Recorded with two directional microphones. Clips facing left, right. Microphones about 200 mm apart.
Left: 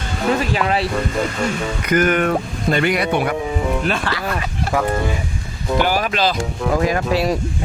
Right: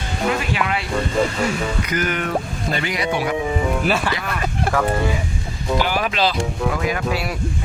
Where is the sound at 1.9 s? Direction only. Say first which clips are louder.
Left 9 dB; 55° left (ahead or behind).